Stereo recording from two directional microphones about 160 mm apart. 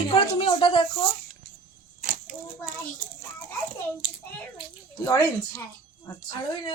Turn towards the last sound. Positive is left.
turn(degrees=25)  # may be behind; listen again after turning